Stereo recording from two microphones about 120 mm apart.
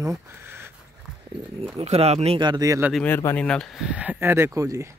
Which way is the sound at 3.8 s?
10° right (ahead or behind).